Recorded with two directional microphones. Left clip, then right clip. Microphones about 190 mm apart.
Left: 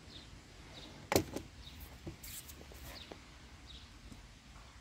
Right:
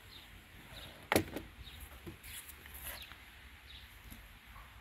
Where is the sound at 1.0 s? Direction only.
60° left (ahead or behind).